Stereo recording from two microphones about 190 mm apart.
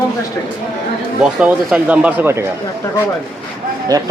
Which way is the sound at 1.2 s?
5° right (ahead or behind).